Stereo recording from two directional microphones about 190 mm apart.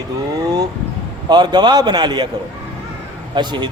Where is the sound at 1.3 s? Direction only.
20° right (ahead or behind).